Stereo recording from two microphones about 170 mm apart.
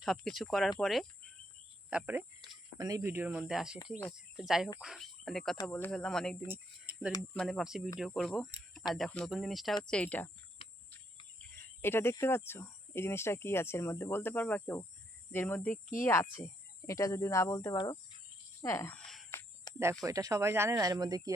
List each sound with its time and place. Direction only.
0.0 s speech: centre (ahead or behind)
0.8 s cricket: centre (ahead or behind)
1.9 s speech: 10° right (ahead or behind)
2.7 s speech: 20° right (ahead or behind); by 6.3 s 5° left (ahead or behind)
6.5 s speech: 10° right (ahead or behind)
7.3 s speech: centre (ahead or behind)
11.3 s speech: 15° left (ahead or behind)
18.9 s cricket: centre (ahead or behind)
19.3 s a sound: 15° left (ahead or behind)
20.1 s speech: 20° right (ahead or behind)